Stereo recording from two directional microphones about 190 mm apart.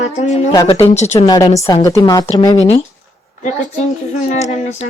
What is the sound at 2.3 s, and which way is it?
Speech, 30° left (ahead or behind).